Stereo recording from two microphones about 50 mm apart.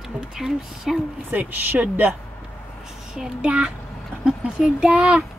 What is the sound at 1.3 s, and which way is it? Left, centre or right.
Speech, right.